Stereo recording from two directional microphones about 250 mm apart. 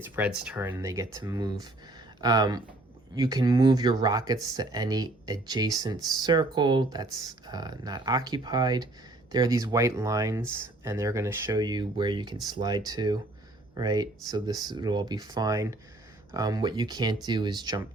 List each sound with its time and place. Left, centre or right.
0.4 s speech: centre